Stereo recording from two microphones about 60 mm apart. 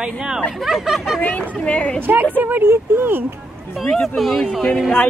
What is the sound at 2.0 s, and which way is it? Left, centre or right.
Speech, right.